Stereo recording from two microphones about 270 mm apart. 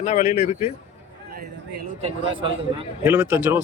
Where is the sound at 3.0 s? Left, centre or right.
Centre.